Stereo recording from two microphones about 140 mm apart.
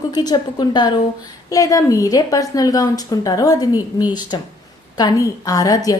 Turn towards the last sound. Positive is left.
turn(degrees=25)  # may be behind; listen again after turning